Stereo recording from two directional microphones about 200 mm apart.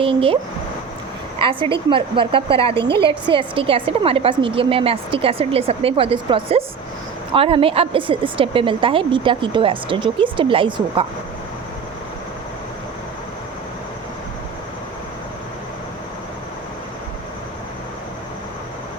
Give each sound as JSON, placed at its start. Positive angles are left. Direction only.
{"t": 0.0, "sound": "a woman's voice", "side_deg": -25}
{"t": 1.4, "sound": "a woman's voice", "side_deg": -25}